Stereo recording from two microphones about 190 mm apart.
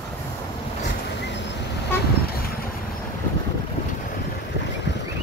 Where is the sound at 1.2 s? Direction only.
65° left (ahead or behind).